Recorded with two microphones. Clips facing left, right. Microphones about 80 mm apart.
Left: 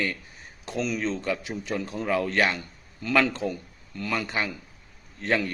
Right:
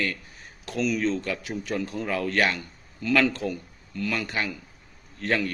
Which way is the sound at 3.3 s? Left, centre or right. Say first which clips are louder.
Even; left.